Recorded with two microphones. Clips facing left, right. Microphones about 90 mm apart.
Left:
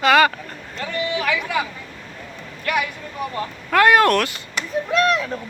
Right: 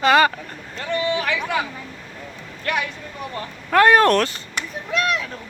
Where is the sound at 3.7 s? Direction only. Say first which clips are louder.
Right 1 dB; 30° right (ahead or behind).